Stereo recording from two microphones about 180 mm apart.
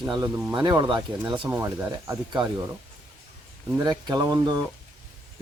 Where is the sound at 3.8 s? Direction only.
25° right (ahead or behind).